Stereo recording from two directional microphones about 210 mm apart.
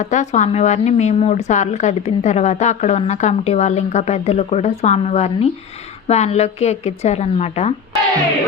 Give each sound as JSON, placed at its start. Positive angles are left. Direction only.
{"t": 0.0, "sound": "a woman's voice", "side_deg": 35}